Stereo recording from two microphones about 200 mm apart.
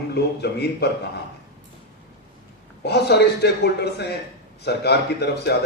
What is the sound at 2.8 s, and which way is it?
A man's voice, 55° left (ahead or behind).